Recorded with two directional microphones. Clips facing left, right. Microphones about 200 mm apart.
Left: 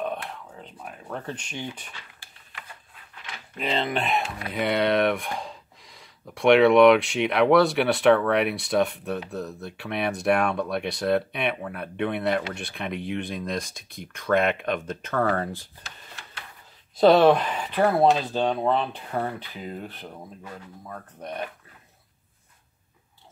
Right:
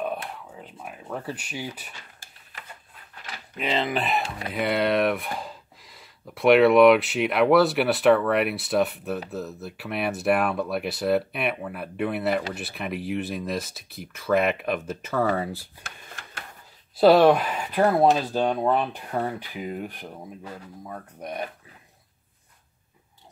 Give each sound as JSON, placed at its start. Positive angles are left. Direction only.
{"t": 0.5, "sound": "speech", "side_deg": -5}
{"t": 3.5, "sound": "speech", "side_deg": 0}
{"t": 15.8, "sound": "drawer open or close", "side_deg": -50}
{"t": 16.9, "sound": "speech", "side_deg": -5}